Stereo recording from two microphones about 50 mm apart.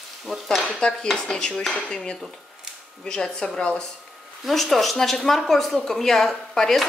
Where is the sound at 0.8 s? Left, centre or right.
Centre.